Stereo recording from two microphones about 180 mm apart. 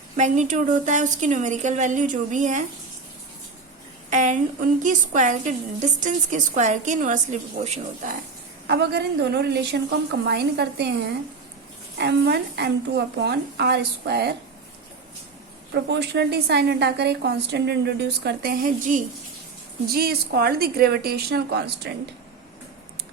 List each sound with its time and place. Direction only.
0.2 s a woman's voice: 45° right (ahead or behind)
4.1 s a woman's voice: 45° right (ahead or behind)
8.6 s a woman's voice: 65° right (ahead or behind)
11.9 s a woman's voice: 65° right (ahead or behind)
15.7 s a woman's voice: 65° right (ahead or behind); by 19.0 s 45° right (ahead or behind)
19.9 s a woman's voice: 60° right (ahead or behind)